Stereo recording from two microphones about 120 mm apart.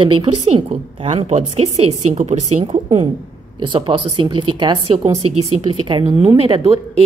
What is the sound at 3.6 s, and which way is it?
A woman's voice, 45° right (ahead or behind).